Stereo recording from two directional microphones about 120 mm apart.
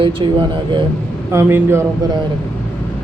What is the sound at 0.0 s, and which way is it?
Speech, 45° right (ahead or behind).